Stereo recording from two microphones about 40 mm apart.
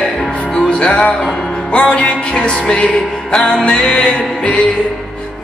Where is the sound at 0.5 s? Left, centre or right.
Left.